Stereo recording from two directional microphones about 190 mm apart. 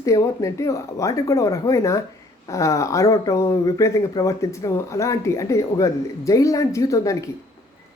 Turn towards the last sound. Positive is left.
turn(degrees=15)  # may be behind; listen again after turning